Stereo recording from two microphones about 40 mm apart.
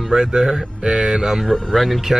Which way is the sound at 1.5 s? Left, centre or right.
Centre.